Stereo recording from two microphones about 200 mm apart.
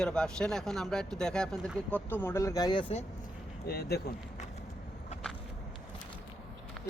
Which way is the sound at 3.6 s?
50° left (ahead or behind).